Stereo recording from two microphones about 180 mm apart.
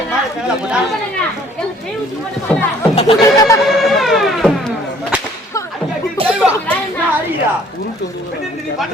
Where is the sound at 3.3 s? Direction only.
20° left (ahead or behind).